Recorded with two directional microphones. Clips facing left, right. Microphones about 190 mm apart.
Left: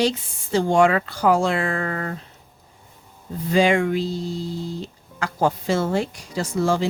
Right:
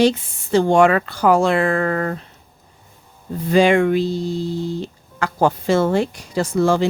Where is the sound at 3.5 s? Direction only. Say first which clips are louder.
Right 4 dB; 60° right (ahead or behind).